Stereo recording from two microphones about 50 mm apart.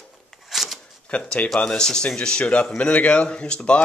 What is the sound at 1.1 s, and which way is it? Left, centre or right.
Speech, left.